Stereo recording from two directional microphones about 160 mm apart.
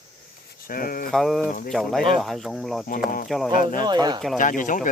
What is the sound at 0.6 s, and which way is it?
Speech, 65° left (ahead or behind).